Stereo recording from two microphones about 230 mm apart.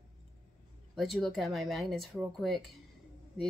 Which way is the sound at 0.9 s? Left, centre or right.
Centre.